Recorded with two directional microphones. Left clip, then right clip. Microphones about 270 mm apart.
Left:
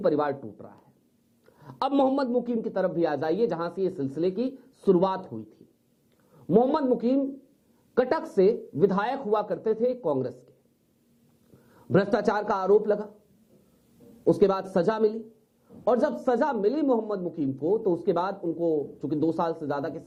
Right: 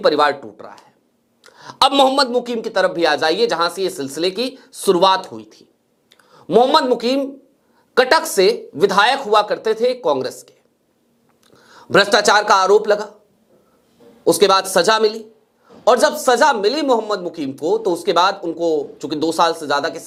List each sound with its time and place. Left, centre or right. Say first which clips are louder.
0.0 s speech: right 10 dB; centre
0.4 s a sound: right 9 dB; centre
1.8 s speech: right 11 dB; centre
6.7 s speech: right 10 dB; centre
11.5 s a sound: right 13 dB; centre
11.9 s speech: right 11 dB; centre
14.3 s speech: right 13 dB; centre
15.2 s a sound: right 7 dB; centre
15.8 s a man's voice: right 11 dB; centre
17.7 s speech: right 8 dB; right
18.0 s speech: right 11 dB; centre
18.5 s speech: right 8 dB; right
18.9 s speech: right 9 dB; centre